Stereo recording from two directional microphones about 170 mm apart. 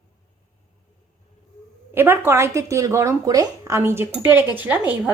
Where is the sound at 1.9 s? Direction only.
10° right (ahead or behind).